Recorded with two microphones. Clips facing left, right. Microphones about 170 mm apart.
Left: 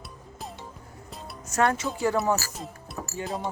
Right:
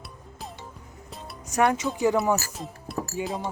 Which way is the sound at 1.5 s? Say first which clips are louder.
Right 2 dB; 15° right (ahead or behind).